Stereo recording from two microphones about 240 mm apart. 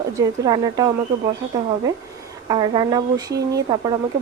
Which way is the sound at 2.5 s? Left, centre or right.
Centre.